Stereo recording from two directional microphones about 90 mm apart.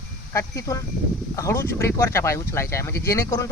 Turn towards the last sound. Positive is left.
turn(degrees=35)  # may be behind; listen again after turning